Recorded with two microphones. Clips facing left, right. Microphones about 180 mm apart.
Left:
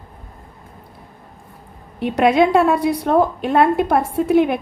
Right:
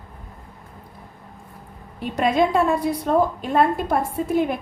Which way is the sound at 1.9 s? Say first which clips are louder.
Left 5 dB; 75° left (ahead or behind).